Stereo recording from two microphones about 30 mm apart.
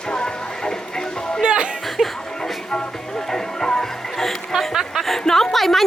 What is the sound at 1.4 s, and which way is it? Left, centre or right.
Music, right.